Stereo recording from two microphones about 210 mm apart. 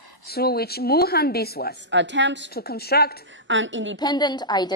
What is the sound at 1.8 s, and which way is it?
Speech, 60° right (ahead or behind).